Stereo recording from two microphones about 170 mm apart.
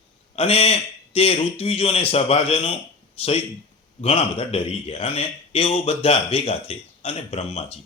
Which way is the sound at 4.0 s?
35° left (ahead or behind).